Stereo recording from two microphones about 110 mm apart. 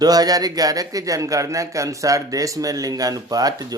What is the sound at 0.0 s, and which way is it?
Speech, 35° right (ahead or behind).